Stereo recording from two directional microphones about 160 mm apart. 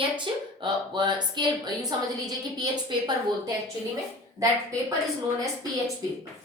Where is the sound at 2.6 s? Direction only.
25° right (ahead or behind).